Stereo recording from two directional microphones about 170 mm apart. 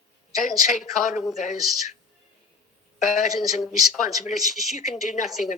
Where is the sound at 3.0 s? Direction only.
45° left (ahead or behind).